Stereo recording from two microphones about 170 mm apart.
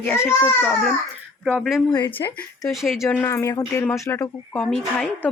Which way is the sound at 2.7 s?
Centre (ahead or behind).